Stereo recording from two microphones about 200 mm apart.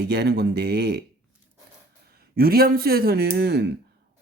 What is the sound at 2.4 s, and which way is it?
Speech, 50° right (ahead or behind).